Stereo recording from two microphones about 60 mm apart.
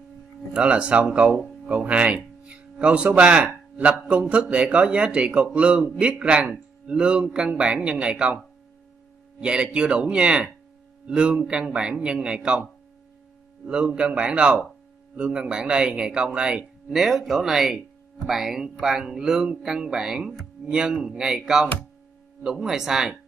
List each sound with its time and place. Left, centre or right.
0.5 s a man's voice: centre
9.4 s speech: centre
13.7 s speech: centre
16.9 s speech: centre
22.4 s speech: centre